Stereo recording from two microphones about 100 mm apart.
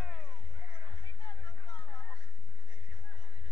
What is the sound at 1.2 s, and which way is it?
Music, 40° left (ahead or behind).